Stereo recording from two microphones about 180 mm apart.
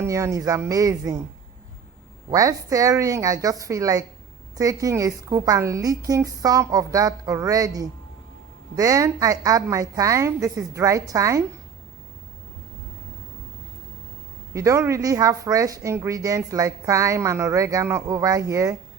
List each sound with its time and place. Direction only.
0.0 s a woman's voice: 15° right (ahead or behind)
2.3 s a woman's voice: 20° right (ahead or behind)
14.5 s a woman's voice: 15° right (ahead or behind)